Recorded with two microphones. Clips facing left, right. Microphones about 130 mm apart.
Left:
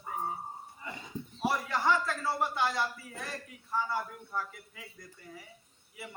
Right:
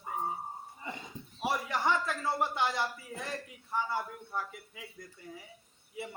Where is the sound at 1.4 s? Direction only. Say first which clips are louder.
Left 1 dB; 20° right (ahead or behind).